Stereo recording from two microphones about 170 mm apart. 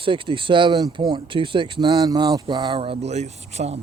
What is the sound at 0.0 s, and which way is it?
Speech, 30° right (ahead or behind).